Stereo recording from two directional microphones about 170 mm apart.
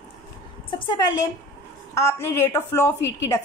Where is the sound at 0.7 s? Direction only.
30° left (ahead or behind).